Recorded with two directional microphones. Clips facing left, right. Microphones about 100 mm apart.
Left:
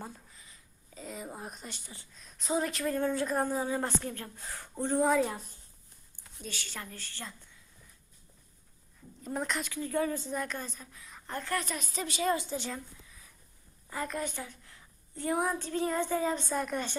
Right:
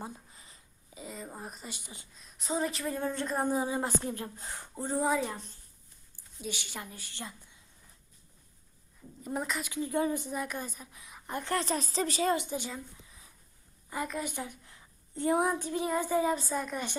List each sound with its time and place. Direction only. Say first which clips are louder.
0.3 s a sound: right 1 dB; 35° right (ahead or behind)
0.9 s a sound: left 1 dB; centre (ahead or behind)
1.7 s a woman's voice: right 1 dB; 15° right (ahead or behind)
2.1 s speech: left 2 dB; centre (ahead or behind)
3.4 s a woman's voice: right 1 dB; 15° right (ahead or behind)
4.7 s speech: left 3 dB; 5° right (ahead or behind)
6.4 s a woman's voice: right 2 dB; 15° right (ahead or behind)
9.2 s a woman's voice: even; 5° right (ahead or behind)
9.7 s a woman's voice: right 2 dB; 20° right (ahead or behind)
11.5 s a woman's voice: right 5 dB; 30° right (ahead or behind)
12.4 s a woman's voice: even; 15° right (ahead or behind)
14.3 s a woman's voice: right 2 dB; 15° right (ahead or behind)
16.4 s speech: left 1 dB; centre (ahead or behind)